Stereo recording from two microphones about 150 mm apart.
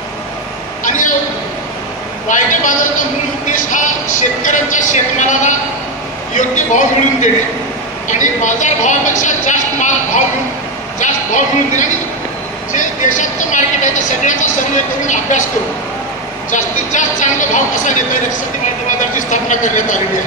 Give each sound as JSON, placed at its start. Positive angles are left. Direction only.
{"t": 2.2, "sound": "a man's voice", "side_deg": 60}
{"t": 16.4, "sound": "a woman's voice", "side_deg": 55}